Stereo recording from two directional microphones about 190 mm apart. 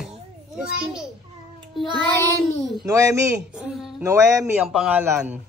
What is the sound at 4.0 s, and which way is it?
Speech, 15° right (ahead or behind).